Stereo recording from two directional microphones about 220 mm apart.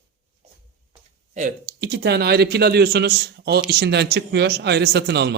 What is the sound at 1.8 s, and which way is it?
A man's voice, 50° right (ahead or behind).